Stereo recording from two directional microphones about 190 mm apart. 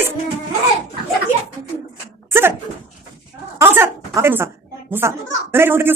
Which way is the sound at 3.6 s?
10° right (ahead or behind).